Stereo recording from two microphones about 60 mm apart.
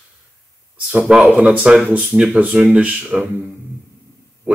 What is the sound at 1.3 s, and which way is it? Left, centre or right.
Speech, right.